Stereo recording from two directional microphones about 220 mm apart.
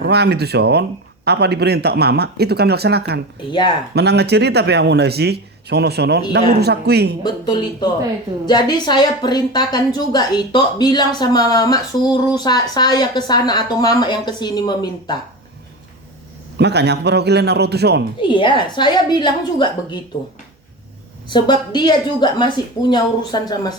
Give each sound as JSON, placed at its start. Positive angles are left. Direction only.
{"t": 0.0, "sound": "speech", "side_deg": -50}
{"t": 3.5, "sound": "a woman's voice", "side_deg": 20}
{"t": 3.9, "sound": "speech", "side_deg": -50}
{"t": 7.3, "sound": "a woman's voice", "side_deg": 20}
{"t": 16.6, "sound": "speech", "side_deg": -50}
{"t": 18.2, "sound": "a woman's voice", "side_deg": 20}
{"t": 21.2, "sound": "a woman's voice", "side_deg": 20}